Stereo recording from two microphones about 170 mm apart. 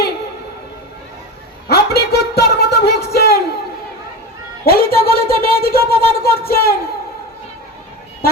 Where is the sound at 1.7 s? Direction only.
70° left (ahead or behind).